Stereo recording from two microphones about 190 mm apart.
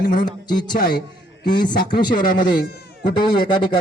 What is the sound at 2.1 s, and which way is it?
Speech, 45° left (ahead or behind).